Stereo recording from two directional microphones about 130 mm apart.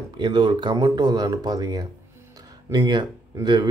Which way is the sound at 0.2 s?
35° right (ahead or behind).